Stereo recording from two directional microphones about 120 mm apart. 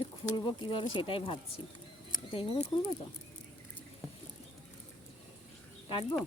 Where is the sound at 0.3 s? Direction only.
40° left (ahead or behind).